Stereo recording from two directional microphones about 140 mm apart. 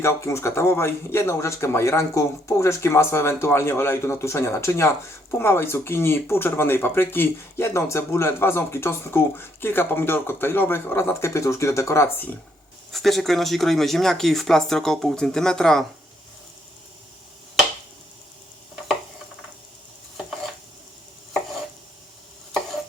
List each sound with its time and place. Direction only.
0.0 s speech: 20° left (ahead or behind)
12.9 s speech: centre (ahead or behind)